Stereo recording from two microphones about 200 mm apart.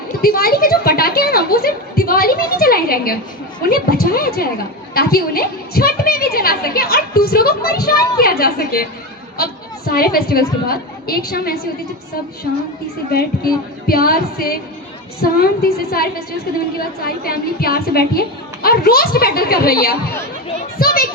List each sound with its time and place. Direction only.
0.2 s a woman's voice: 50° left (ahead or behind)
13.1 s a woman's voice: 50° left (ahead or behind)